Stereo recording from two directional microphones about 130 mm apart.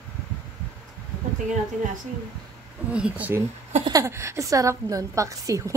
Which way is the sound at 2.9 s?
10° right (ahead or behind).